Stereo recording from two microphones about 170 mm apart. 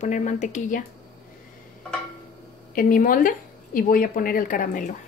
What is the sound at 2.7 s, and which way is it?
Speech, 55° left (ahead or behind).